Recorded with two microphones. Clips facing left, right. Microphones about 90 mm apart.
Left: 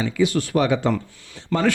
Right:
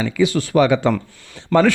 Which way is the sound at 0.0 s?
90° right.